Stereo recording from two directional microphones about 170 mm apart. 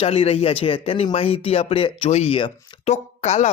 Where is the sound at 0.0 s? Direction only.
35° left (ahead or behind).